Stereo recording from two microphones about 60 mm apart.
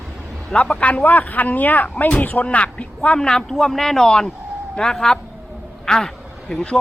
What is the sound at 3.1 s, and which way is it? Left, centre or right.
Speech, centre.